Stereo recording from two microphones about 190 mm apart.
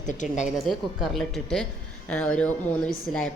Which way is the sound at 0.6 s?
Centre (ahead or behind).